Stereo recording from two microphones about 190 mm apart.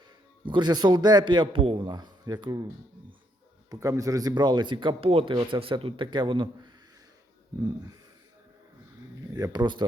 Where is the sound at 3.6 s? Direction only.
15° right (ahead or behind).